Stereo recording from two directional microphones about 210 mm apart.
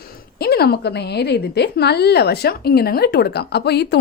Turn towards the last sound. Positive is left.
turn(degrees=50)  # may be behind; listen again after turning